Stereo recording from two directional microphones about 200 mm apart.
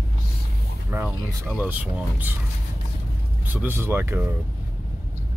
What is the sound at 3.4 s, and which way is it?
Speech, 10° right (ahead or behind).